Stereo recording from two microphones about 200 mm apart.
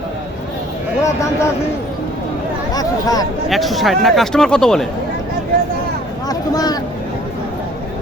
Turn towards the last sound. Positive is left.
turn(degrees=20)  # may be behind; listen again after turning